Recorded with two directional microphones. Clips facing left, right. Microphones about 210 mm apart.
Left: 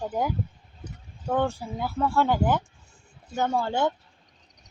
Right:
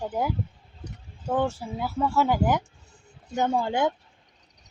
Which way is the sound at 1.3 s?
5° right (ahead or behind).